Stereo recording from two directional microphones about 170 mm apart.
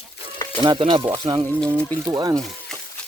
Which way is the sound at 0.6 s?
25° right (ahead or behind).